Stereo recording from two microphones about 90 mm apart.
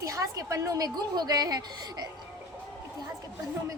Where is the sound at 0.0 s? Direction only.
40° right (ahead or behind).